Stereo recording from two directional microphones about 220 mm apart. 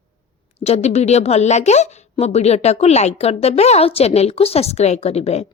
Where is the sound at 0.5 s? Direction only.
30° left (ahead or behind).